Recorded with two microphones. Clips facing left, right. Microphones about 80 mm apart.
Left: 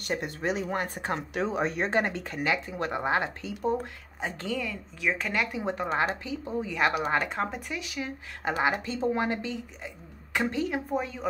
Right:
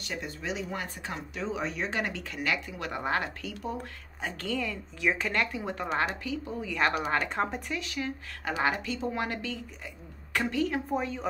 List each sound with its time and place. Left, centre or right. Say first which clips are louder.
0.0 s speech: left 6 dB; left
2.0 s speech: left 5 dB; left
4.6 s a woman's voice: even; centre; by 6.8 s left
6.8 s a woman's voice: left 1 dB; centre
7.7 s a woman's voice: right 1 dB; centre
8.4 s speech: left 2 dB; left
10.9 s speech: even; centre